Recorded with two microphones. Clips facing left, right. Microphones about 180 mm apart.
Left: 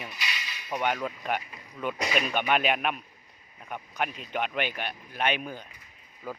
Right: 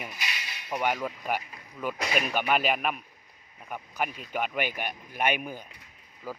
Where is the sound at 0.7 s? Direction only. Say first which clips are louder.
Even; 5° right (ahead or behind).